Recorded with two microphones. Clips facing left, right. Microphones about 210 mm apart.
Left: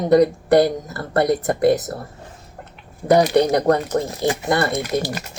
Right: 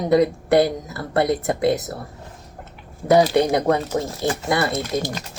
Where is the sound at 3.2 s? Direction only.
15° left (ahead or behind).